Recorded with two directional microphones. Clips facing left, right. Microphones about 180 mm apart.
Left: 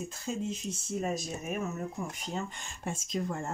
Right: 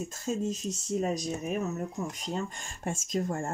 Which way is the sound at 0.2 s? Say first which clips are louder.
Right 4 dB; 40° right (ahead or behind).